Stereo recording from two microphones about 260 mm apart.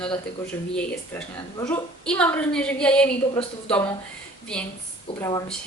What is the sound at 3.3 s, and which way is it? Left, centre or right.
Speech, left.